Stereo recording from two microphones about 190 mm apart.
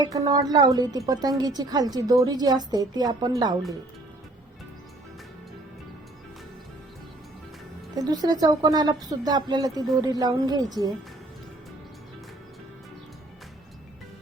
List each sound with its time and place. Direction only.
0.0 s a woman's voice: 20° right (ahead or behind)
7.9 s a woman's voice: 20° right (ahead or behind)